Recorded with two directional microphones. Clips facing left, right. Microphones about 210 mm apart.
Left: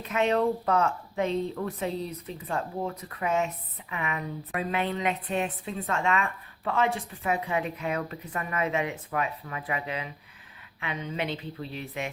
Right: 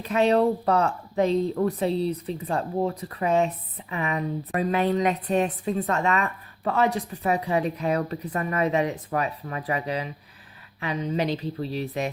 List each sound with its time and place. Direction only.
0.0 s speech: 35° right (ahead or behind)